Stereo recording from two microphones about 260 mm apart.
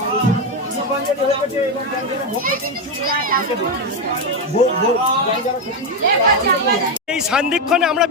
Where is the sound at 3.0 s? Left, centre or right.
Right.